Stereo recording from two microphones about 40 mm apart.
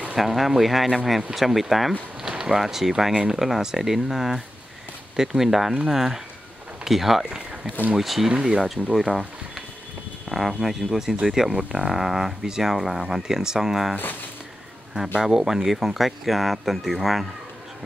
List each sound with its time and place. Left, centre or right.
0.2 s speech: centre
2.2 s speech: centre
8.9 s speech: centre
10.6 s speech: centre
11.5 s speech: right
11.9 s speech: centre
15.1 s speech: centre